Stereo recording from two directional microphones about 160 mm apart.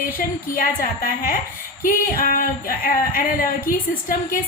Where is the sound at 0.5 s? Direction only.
65° left (ahead or behind).